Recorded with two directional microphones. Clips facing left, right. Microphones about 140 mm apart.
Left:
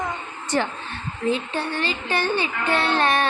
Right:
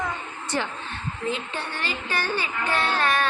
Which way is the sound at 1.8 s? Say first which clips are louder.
Left 2 dB; 25° left (ahead or behind).